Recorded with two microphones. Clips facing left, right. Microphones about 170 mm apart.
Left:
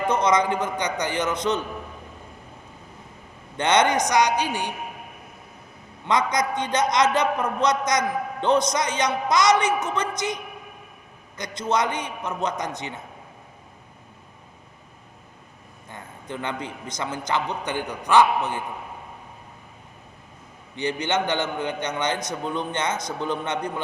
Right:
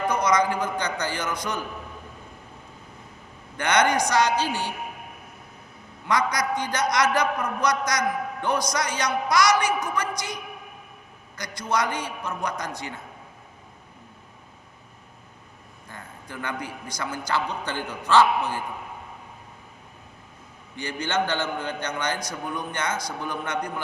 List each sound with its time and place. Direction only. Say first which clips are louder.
0.1 s a man's voice: left 2 dB; 25° left (ahead or behind)
3.6 s a man's voice: left 2 dB; 25° left (ahead or behind)
6.1 s a man's voice: left 2 dB; 20° left (ahead or behind)
15.9 s a man's voice: left 5 dB; 20° left (ahead or behind)
20.7 s a man's voice: left 2 dB; 20° left (ahead or behind)